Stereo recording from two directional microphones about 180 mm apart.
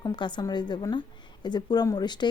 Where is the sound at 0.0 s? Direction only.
25° left (ahead or behind).